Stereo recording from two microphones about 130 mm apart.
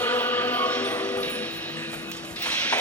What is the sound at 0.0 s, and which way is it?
Music, 15° left (ahead or behind).